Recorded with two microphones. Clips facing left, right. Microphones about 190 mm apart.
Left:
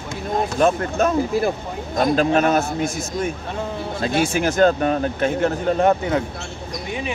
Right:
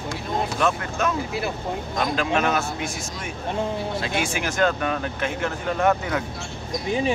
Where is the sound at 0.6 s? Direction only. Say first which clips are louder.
Left 8 dB; 40° left (ahead or behind).